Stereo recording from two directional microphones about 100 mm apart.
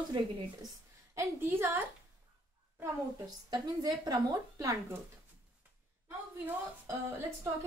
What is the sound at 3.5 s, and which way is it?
Speech, 40° right (ahead or behind).